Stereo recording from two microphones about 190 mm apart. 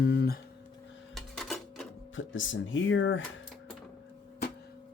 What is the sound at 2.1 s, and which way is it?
Speech, 90° left.